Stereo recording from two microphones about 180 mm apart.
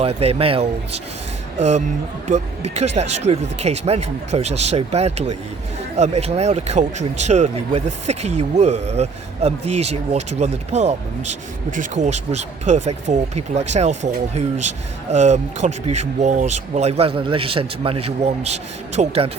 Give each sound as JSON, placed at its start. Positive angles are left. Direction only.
{"t": 0.0, "sound": "speech", "side_deg": -35}
{"t": 2.2, "sound": "speech", "side_deg": -40}